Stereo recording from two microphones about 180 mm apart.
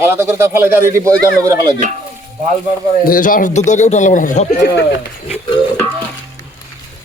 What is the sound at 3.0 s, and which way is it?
A man's voice, 50° left (ahead or behind).